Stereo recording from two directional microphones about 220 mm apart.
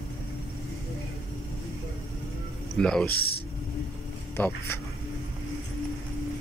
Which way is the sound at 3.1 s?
45° left (ahead or behind).